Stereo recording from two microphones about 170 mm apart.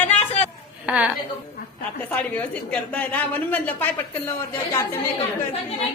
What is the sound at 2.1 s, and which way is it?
A woman's voice, 10° left (ahead or behind).